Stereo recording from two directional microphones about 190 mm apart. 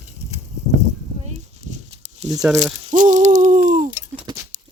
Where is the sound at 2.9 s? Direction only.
40° right (ahead or behind).